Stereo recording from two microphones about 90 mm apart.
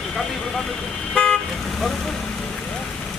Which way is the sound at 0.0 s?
5° left (ahead or behind).